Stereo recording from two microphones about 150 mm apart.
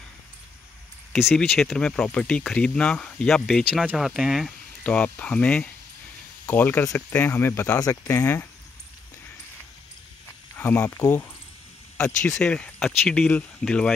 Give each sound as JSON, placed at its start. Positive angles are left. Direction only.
{"t": 1.1, "sound": "speech", "side_deg": 0}
{"t": 4.8, "sound": "speech", "side_deg": 10}
{"t": 10.6, "sound": "speech", "side_deg": 15}
{"t": 12.4, "sound": "speech", "side_deg": 5}